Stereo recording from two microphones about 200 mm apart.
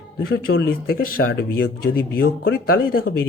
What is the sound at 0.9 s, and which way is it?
Speech, 50° left (ahead or behind).